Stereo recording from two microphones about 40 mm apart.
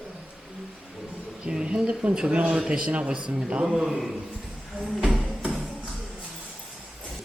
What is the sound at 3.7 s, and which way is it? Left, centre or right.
Speech, centre.